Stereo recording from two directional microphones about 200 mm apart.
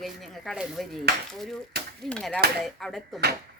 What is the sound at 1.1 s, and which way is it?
Speech, 55° right (ahead or behind).